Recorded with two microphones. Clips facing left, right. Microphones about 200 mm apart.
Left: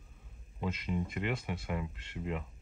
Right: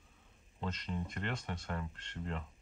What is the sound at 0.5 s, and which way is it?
Speech, 10° left (ahead or behind).